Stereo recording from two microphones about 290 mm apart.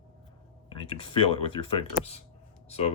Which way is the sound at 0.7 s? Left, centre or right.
Centre.